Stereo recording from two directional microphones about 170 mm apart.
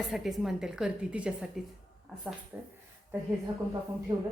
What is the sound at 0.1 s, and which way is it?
A woman's voice, centre (ahead or behind).